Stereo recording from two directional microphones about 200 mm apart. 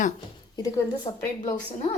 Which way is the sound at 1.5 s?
30° left (ahead or behind).